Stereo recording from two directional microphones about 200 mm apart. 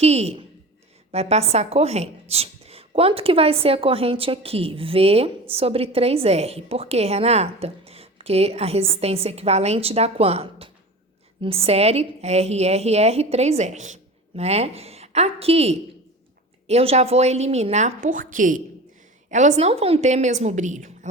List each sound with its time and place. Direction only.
0.0 s a woman's voice: 30° right (ahead or behind)